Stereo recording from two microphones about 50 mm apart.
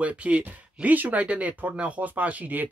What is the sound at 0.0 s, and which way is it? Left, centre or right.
Speech, right.